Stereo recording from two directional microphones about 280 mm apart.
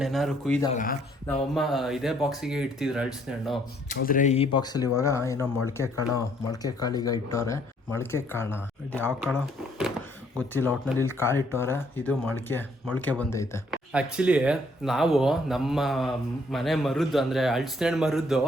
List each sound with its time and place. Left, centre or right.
0.0 s speech: centre
0.7 s speech: left
1.3 s speech: centre
3.8 s speech: left; by 8.5 s centre
8.5 s speech: centre
10.5 s speech: centre
13.7 s speech: centre